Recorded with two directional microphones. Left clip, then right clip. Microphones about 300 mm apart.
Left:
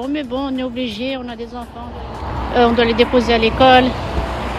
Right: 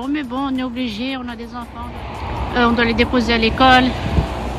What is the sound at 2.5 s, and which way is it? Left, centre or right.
Speech, centre.